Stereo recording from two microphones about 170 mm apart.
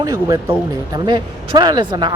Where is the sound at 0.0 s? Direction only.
20° right (ahead or behind).